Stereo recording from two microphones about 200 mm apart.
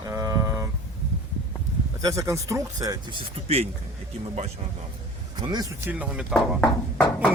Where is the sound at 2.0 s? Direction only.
15° right (ahead or behind).